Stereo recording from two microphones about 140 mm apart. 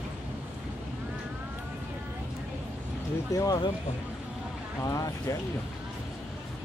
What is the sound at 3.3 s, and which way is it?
Speech, 25° left (ahead or behind).